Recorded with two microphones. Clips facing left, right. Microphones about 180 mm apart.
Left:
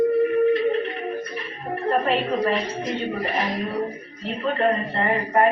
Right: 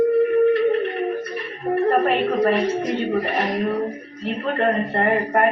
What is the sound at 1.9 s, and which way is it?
Speech, 55° right (ahead or behind).